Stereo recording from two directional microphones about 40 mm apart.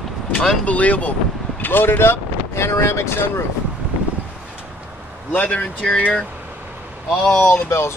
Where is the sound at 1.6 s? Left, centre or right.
Left.